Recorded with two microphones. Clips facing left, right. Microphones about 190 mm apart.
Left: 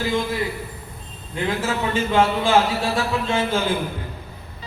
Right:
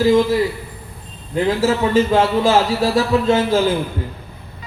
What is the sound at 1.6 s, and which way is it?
Speech, 40° right (ahead or behind).